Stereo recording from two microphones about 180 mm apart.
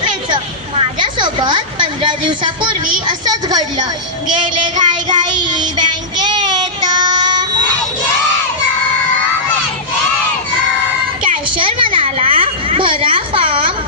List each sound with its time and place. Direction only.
0.8 s a woman's voice: 25° right (ahead or behind)
4.8 s child singing: 25° right (ahead or behind)
6.2 s child singing: 25° right (ahead or behind)
11.5 s a sound: 30° right (ahead or behind)